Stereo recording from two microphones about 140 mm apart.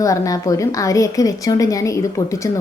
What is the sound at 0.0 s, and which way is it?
A woman's voice, 25° left (ahead or behind).